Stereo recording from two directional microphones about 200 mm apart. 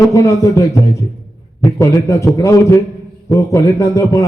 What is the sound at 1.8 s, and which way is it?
A man's voice, 15° left (ahead or behind).